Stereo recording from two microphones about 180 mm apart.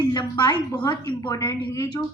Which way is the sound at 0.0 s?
20° left (ahead or behind).